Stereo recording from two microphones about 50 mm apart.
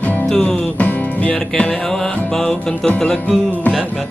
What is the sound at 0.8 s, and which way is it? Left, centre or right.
Music, left.